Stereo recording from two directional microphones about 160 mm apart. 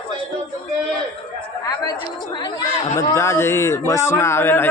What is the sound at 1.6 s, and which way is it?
Speech, 25° left (ahead or behind).